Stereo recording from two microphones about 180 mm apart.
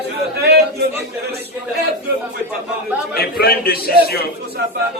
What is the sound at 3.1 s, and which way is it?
Speech, 60° left (ahead or behind).